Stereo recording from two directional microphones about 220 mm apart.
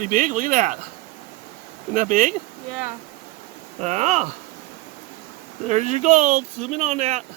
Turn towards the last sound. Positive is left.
turn(degrees=-30)  # may be behind; listen again after turning